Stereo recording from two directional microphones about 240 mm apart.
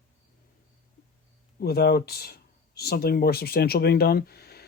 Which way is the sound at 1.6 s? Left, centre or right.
Left.